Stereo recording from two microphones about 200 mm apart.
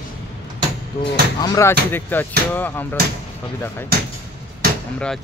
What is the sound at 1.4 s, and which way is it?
Speech, 15° left (ahead or behind).